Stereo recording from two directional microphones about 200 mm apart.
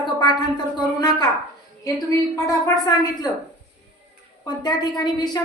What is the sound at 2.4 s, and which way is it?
Speech, 15° left (ahead or behind).